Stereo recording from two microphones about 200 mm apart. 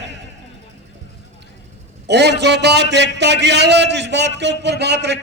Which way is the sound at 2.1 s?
60° right (ahead or behind).